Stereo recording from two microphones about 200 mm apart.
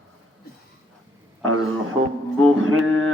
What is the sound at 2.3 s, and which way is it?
Mantra, 90° right.